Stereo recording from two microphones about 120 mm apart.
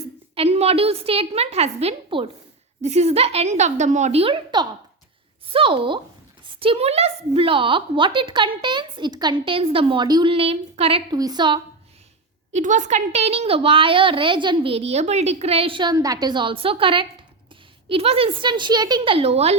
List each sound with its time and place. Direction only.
0.3 s a woman's voice: 60° right (ahead or behind)
2.8 s a woman's voice: 65° right (ahead or behind)
5.5 s speech: 45° right (ahead or behind)
10.3 s a woman's voice: 55° right (ahead or behind)
11.1 s a woman's voice: 35° right (ahead or behind)
12.5 s speech: 90° right; by 19.5 s 60° right (ahead or behind)